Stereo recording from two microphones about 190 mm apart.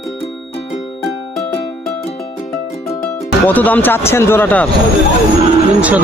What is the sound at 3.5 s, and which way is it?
Speech, 10° left (ahead or behind).